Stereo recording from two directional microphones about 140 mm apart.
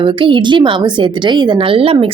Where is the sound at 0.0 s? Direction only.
35° right (ahead or behind).